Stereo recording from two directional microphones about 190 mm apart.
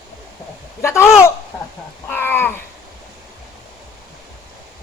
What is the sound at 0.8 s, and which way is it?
Speech, 15° left (ahead or behind).